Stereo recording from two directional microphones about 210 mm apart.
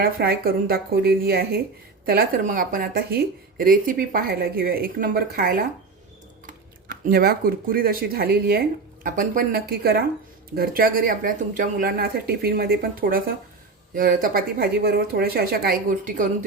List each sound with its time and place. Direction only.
0.0 s speech: 45° right (ahead or behind)